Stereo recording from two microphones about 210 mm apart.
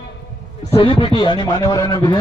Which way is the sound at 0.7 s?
25° left (ahead or behind).